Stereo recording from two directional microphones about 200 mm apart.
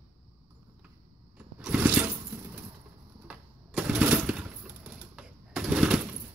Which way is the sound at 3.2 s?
5° right (ahead or behind).